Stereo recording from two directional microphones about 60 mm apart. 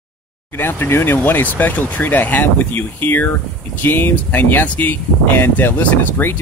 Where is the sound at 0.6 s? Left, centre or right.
Left.